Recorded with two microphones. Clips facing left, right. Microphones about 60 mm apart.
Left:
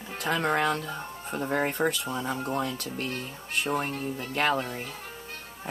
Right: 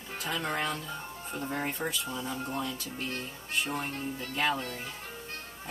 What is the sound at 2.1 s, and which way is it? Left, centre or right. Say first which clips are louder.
Speech: left 5 dB; left.